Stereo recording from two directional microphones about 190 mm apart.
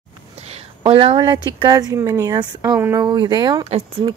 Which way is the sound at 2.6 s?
10° right (ahead or behind).